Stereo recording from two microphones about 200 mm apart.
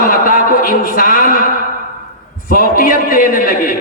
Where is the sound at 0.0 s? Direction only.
45° left (ahead or behind).